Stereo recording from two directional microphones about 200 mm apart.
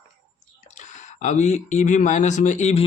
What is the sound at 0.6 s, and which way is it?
Speech, 35° left (ahead or behind).